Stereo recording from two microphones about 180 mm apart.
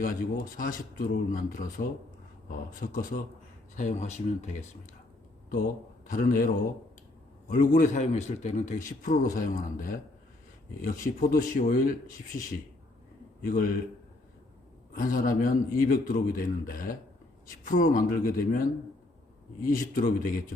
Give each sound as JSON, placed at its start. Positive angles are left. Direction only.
{"t": 0.0, "sound": "a man's voice", "side_deg": 50}
{"t": 2.8, "sound": "a man's voice", "side_deg": 50}
{"t": 6.1, "sound": "a man's voice", "side_deg": 45}
{"t": 7.5, "sound": "a man's voice", "side_deg": 50}
{"t": 14.9, "sound": "a man's voice", "side_deg": 50}
{"t": 19.6, "sound": "a man's voice", "side_deg": 50}